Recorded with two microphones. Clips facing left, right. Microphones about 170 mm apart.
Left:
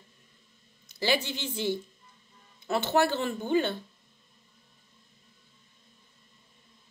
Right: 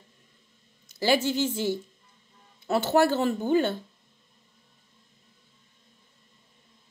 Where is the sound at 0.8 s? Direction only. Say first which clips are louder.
Right 5 dB; 45° right (ahead or behind).